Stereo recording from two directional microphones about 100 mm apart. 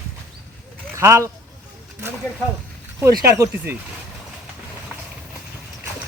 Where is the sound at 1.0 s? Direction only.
30° right (ahead or behind).